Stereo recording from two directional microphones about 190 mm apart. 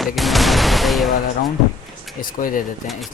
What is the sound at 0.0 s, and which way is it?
Speech, centre (ahead or behind).